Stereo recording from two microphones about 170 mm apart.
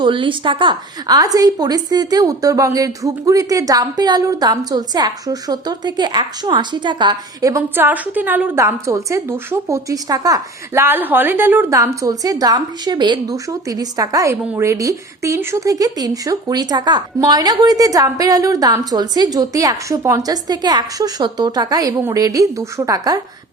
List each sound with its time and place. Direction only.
0.0 s a woman's voice: 30° right (ahead or behind)